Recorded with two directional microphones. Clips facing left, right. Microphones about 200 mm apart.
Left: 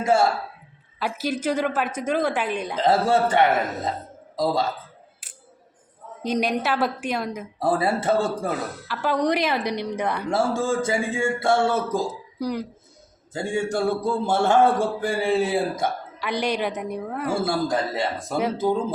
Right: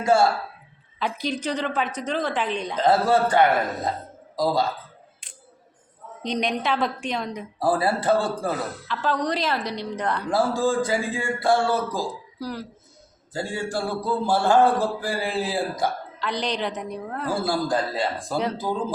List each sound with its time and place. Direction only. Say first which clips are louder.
0.0 s a man's voice: right 1 dB; 25° left (ahead or behind)
0.9 s a woman's voice: left 1 dB; 5° left (ahead or behind)
2.7 s speech: even; 25° left (ahead or behind)
5.2 s a sound: right 1 dB; 5° left (ahead or behind)
6.2 s a woman's voice: left 2 dB; 5° left (ahead or behind)
7.6 s speech: even; 25° left (ahead or behind)
8.9 s a woman's voice: left 3 dB; 10° left (ahead or behind)
10.3 s speech: right 1 dB; 25° left (ahead or behind)
16.1 s a woman's voice: left 2 dB; 10° left (ahead or behind)
17.4 s speech: right 1 dB; 25° left (ahead or behind)